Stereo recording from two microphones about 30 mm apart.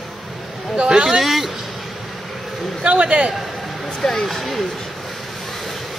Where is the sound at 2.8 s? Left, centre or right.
Right.